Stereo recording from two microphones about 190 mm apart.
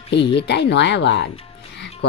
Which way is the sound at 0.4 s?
65° left (ahead or behind).